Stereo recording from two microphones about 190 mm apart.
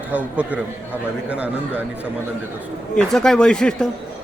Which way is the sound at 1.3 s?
5° right (ahead or behind).